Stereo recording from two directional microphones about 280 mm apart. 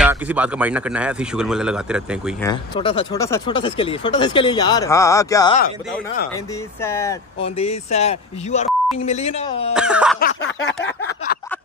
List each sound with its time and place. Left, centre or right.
0.0 s speech: centre
2.4 s speech: centre
6.8 s speech: centre
7.4 s speech: left
9.8 s speech: centre
10.2 s a sound: left